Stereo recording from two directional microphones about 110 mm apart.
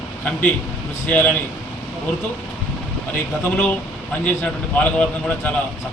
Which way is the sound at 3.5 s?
15° left (ahead or behind).